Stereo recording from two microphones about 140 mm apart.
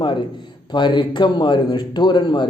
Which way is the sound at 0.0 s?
35° left (ahead or behind).